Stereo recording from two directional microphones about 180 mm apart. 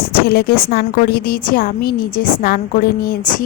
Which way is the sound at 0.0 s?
60° left (ahead or behind).